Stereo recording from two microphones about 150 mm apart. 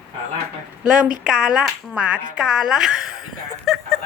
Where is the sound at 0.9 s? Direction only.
5° right (ahead or behind).